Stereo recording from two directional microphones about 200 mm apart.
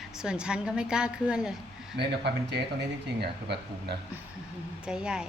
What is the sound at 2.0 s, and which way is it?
Speech, 55° right (ahead or behind).